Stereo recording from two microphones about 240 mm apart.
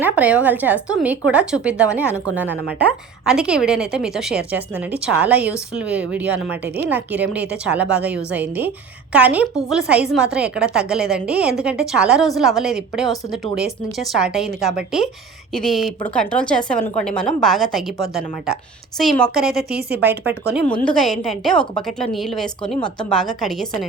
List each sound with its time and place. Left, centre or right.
0.0 s a woman's voice: centre
20.4 s a woman's voice: right
20.8 s a woman's voice: centre